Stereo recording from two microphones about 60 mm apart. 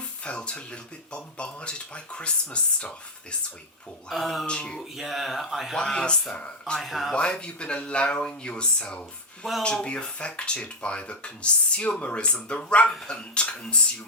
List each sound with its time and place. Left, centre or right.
0.3 s speech: centre
4.1 s speech: centre
4.4 s speech: centre
4.8 s speech: centre
5.7 s speech: centre
6.7 s speech: centre
7.1 s speech: centre